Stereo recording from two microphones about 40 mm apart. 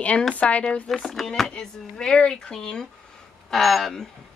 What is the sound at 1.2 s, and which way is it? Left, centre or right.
Speech, centre.